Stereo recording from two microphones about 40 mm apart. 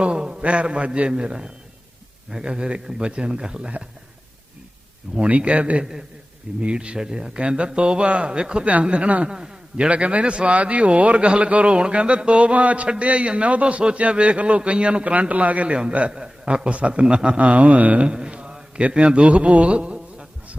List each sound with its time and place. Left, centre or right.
0.0 s a man's voice: right
5.1 s speech: centre
5.4 s a man's voice: right
9.3 s a man's voice: centre
9.9 s a man's voice: right
18.1 s mantra: right